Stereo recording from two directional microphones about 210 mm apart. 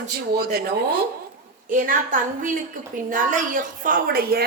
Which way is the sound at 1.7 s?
40° right (ahead or behind).